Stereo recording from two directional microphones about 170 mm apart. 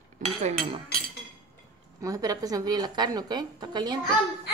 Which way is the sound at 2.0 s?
20° right (ahead or behind).